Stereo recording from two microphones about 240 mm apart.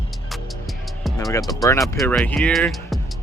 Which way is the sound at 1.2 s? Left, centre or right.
Centre.